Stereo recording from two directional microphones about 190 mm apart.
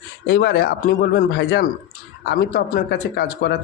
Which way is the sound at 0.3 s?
60° left (ahead or behind).